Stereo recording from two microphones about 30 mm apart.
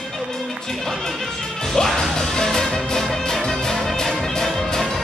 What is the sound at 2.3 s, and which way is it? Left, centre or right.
Music, centre.